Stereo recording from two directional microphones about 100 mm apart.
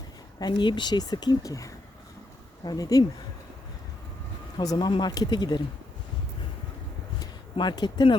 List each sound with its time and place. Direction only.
0.3 s speech: 45° left (ahead or behind)
4.5 s speech: 40° left (ahead or behind)
7.5 s speech: 50° left (ahead or behind)